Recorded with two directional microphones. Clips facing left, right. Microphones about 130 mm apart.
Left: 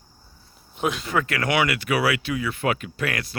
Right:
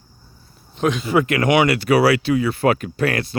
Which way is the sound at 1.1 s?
20° right (ahead or behind).